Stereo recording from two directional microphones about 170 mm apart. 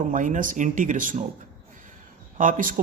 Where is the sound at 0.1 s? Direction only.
50° right (ahead or behind).